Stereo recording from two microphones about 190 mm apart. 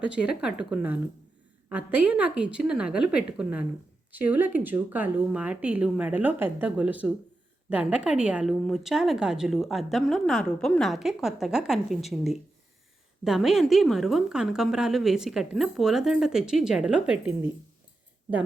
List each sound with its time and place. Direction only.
0.0 s a woman's voice: 5° right (ahead or behind)